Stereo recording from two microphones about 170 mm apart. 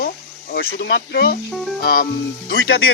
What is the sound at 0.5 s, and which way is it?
Speech, 80° left.